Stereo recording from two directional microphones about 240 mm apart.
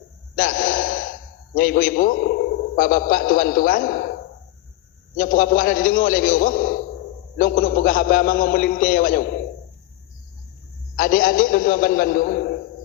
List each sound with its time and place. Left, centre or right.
0.3 s gasp: left
1.5 s a man's voice: left
5.1 s a man's voice: left
10.9 s a man's voice: left